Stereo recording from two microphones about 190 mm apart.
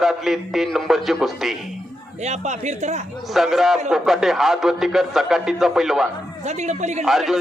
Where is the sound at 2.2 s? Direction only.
35° right (ahead or behind).